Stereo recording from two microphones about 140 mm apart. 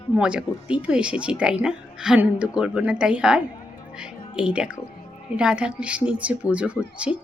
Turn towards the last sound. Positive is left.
turn(degrees=45)  # may be behind; listen again after turning